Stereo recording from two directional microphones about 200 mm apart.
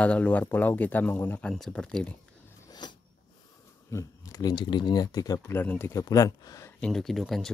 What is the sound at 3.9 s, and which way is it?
Speech, 15° left (ahead or behind).